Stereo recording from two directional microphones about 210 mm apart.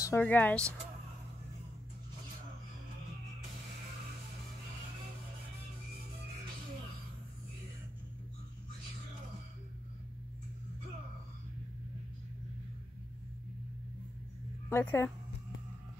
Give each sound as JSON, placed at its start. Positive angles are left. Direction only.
{"t": 0.0, "sound": "speech", "side_deg": 10}
{"t": 14.7, "sound": "speech", "side_deg": 10}